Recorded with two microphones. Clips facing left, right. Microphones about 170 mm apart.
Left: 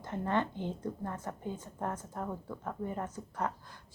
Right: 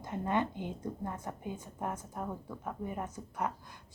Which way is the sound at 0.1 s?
15° right (ahead or behind).